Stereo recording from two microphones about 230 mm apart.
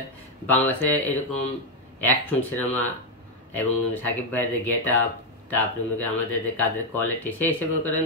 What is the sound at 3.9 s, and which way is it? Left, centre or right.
Speech, centre.